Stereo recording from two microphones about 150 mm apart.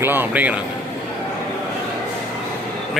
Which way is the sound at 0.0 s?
15° right (ahead or behind).